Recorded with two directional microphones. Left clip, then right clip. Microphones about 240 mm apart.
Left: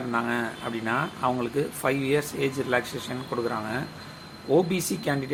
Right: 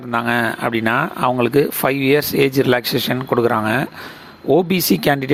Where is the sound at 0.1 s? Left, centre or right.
Right.